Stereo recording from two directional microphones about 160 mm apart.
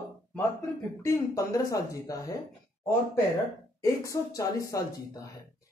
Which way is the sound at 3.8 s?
20° left (ahead or behind).